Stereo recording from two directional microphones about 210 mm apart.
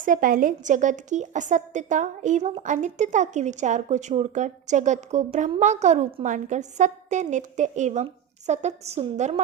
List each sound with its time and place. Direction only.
0.0 s a woman's voice: 40° right (ahead or behind)